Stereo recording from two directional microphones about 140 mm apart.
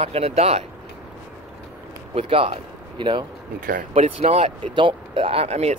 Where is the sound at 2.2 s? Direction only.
40° right (ahead or behind).